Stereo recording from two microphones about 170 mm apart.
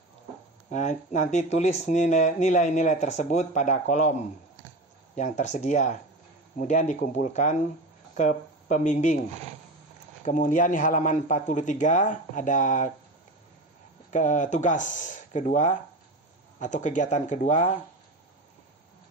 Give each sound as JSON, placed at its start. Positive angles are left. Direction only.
{"t": 0.7, "sound": "speech", "side_deg": 45}
{"t": 10.2, "sound": "speech", "side_deg": 50}
{"t": 14.1, "sound": "speech", "side_deg": 45}